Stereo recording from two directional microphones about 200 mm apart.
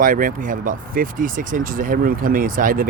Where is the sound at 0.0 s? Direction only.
45° right (ahead or behind).